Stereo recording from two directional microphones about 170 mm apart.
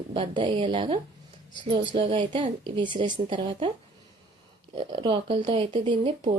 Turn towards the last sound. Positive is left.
turn(degrees=-30)  # may be behind; listen again after turning